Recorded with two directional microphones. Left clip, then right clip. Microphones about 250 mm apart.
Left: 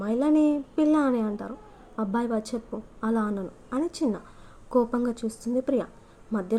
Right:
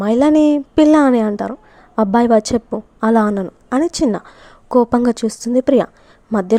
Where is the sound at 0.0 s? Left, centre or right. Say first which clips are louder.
Right 11 dB; right.